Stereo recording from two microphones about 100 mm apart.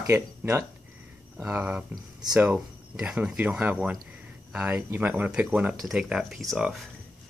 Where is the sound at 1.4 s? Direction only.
15° right (ahead or behind); by 6.9 s centre (ahead or behind).